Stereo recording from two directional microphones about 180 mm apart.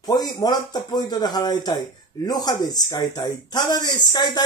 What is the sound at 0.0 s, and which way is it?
Speech, 20° left (ahead or behind).